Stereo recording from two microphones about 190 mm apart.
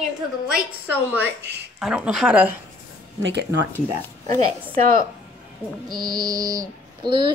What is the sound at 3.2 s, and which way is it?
Speech, 65° right (ahead or behind).